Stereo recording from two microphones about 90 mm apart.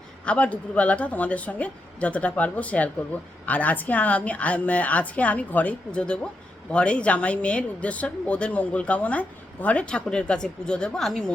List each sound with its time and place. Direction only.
0.3 s speech: 15° left (ahead or behind)